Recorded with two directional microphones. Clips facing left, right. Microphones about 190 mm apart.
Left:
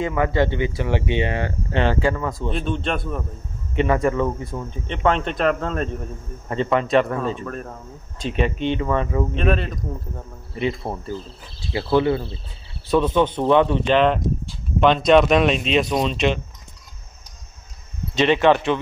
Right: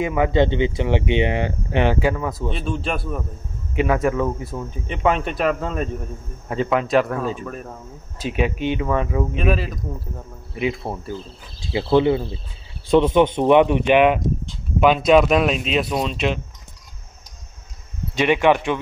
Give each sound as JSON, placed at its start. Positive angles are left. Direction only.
{"t": 0.0, "sound": "speech", "side_deg": -15}
{"t": 11.7, "sound": "speech", "side_deg": -20}
{"t": 18.1, "sound": "speech", "side_deg": -10}